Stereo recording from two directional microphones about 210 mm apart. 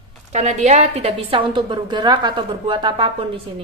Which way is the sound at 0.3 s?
35° right (ahead or behind).